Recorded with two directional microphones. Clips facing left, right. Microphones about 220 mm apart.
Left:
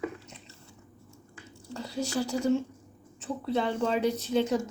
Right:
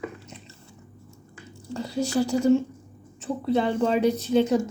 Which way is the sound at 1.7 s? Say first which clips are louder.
Right 6 dB; 10° right (ahead or behind).